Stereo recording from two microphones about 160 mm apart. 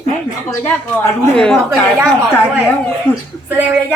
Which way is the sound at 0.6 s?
10° left (ahead or behind).